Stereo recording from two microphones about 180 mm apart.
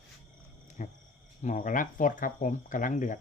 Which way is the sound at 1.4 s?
45° left (ahead or behind).